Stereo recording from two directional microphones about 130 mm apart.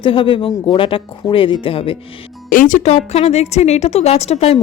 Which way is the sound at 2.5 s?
85° left.